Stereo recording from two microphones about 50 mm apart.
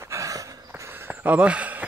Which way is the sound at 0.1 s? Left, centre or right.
Right.